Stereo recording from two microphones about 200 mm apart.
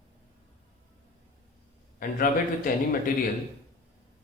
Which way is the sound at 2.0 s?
45° left (ahead or behind).